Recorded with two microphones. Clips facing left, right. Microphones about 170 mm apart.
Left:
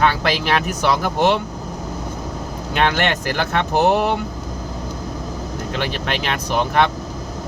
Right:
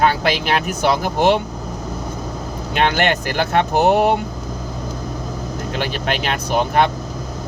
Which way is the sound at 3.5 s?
45° right (ahead or behind).